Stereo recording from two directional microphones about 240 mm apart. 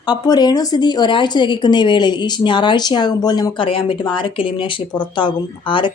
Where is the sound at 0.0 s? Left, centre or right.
Centre.